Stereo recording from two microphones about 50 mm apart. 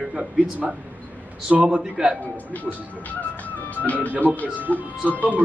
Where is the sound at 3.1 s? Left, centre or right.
Left.